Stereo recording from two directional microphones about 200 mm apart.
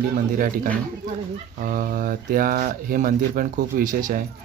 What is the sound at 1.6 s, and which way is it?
Speech, 45° right (ahead or behind).